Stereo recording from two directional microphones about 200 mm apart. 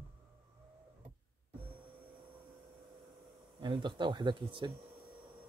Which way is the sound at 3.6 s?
20° right (ahead or behind).